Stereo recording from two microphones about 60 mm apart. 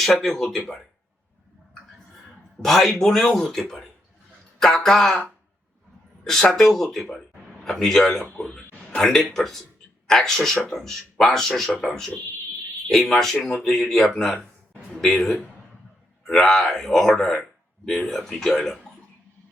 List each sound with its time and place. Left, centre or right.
0.0 s speech: centre
2.6 s speech: centre
6.2 s speech: centre